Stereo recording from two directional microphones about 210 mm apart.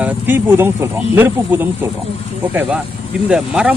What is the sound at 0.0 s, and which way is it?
A man's voice, 10° right (ahead or behind).